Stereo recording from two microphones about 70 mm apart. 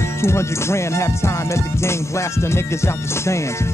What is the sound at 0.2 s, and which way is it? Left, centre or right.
Music, left.